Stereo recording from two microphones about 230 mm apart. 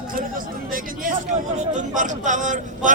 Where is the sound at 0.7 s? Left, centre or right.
Right.